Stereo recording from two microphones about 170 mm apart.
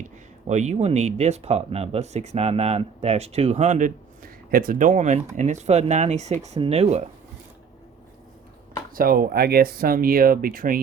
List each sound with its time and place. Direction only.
0.0 s speech: 45° right (ahead or behind)
9.0 s speech: 60° right (ahead or behind)